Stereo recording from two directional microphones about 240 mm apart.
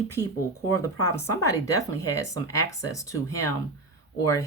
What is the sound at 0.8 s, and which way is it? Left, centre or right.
Speech, centre.